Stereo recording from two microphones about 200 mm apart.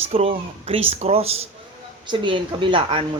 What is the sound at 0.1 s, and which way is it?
Speech, 30° right (ahead or behind).